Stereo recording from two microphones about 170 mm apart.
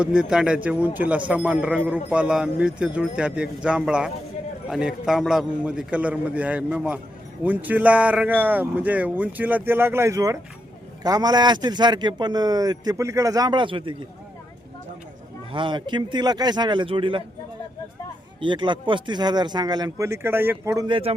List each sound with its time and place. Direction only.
0.0 s a man's voice: 5° right (ahead or behind); by 13.9 s 30° right (ahead or behind)
15.5 s a man's voice: 30° right (ahead or behind)
18.3 s a man's voice: 30° right (ahead or behind)
20.8 s speech: 30° right (ahead or behind)